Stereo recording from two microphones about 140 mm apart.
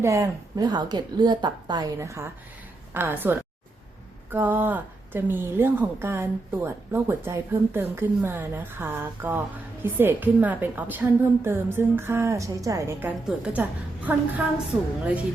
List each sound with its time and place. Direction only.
0.0 s a woman's voice: 25° right (ahead or behind)